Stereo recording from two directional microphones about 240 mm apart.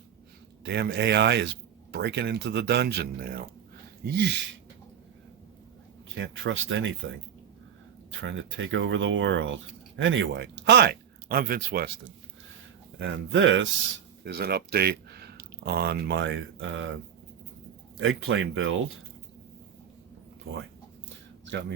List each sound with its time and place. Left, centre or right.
0.6 s speech: right
6.1 s speech: right
8.2 s speech: right
13.0 s speech: right
14.3 s speech: right
18.0 s speech: right